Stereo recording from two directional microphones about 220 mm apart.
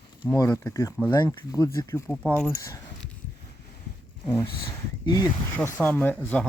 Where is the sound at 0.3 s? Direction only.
15° left (ahead or behind).